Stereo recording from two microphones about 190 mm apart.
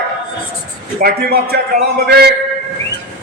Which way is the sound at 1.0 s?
55° right (ahead or behind).